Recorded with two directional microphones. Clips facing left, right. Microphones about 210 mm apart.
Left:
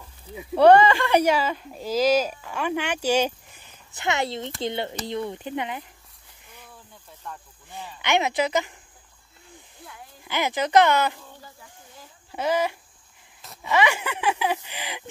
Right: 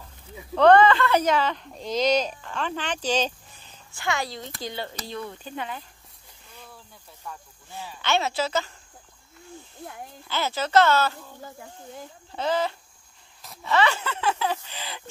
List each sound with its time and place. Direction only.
0.3 s speech: 15° left (ahead or behind)
8.0 s speech: 15° left (ahead or behind)
10.2 s speech: 15° left (ahead or behind)
12.3 s speech: 10° left (ahead or behind)